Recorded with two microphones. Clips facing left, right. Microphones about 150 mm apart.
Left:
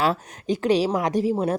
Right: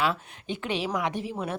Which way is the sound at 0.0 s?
40° left (ahead or behind).